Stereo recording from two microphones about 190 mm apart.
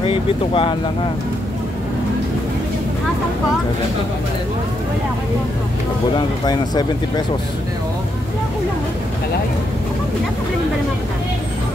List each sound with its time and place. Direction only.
0.0 s speech: 30° left (ahead or behind)
6.1 s speech: 20° left (ahead or behind)